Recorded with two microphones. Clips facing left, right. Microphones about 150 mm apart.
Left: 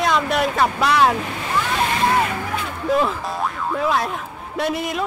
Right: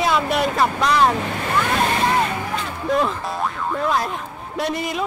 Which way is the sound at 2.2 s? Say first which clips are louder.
Even; 5° left (ahead or behind).